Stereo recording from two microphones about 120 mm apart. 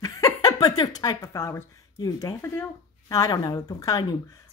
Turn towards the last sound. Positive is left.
turn(degrees=30)  # may be behind; listen again after turning